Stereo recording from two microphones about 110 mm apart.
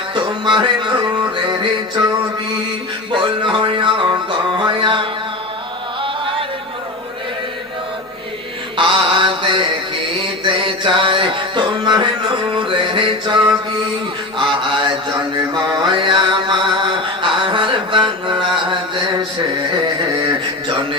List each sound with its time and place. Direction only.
0.4 s a sound: 45° right (ahead or behind)
3.1 s music: 50° right (ahead or behind)
6.0 s chant: 50° right (ahead or behind)
8.7 s mantra: 50° right (ahead or behind)
10.4 s music: 50° right (ahead or behind)
12.5 s a sound: 50° right (ahead or behind)
14.3 s mantra: 50° right (ahead or behind)